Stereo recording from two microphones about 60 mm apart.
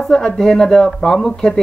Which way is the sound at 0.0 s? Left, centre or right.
Centre.